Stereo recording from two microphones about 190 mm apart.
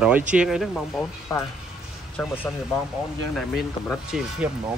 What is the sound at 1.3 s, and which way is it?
Speech, 15° left (ahead or behind).